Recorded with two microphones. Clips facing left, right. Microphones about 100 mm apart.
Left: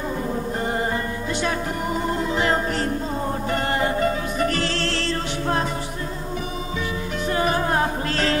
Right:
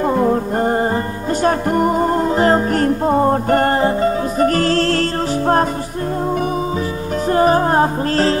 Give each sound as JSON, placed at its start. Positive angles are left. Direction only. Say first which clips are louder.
{"t": 0.1, "sound": "music", "louder": "right 13 dB", "side_deg": -65}
{"t": 0.6, "sound": "music", "louder": "right 7 dB", "side_deg": -45}
{"t": 3.8, "sound": "music", "louder": "right 6 dB", "side_deg": -35}
{"t": 7.2, "sound": "music", "louder": "right 8 dB", "side_deg": -40}